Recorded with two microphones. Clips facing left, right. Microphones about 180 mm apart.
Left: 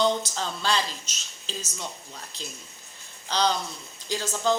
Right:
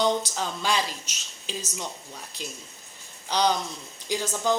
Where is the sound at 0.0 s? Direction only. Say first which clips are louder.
Even; 15° right (ahead or behind).